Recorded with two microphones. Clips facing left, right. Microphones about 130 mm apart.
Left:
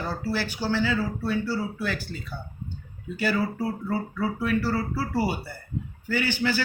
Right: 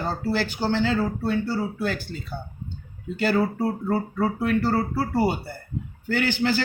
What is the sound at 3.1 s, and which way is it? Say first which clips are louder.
Speech: right 4 dB; 60° right (ahead or behind).